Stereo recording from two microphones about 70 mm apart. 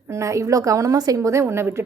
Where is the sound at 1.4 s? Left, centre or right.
Right.